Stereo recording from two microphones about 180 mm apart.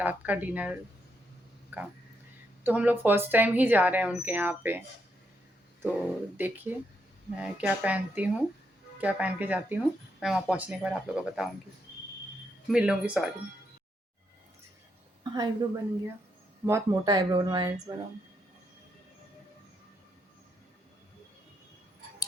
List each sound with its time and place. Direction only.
0.0 s speech: 10° right (ahead or behind)
6.3 s speech: 10° right (ahead or behind)
12.6 s speech: 5° right (ahead or behind)
15.2 s speech: 20° right (ahead or behind)